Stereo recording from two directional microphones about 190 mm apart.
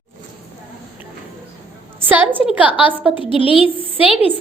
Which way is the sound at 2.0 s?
10° right (ahead or behind).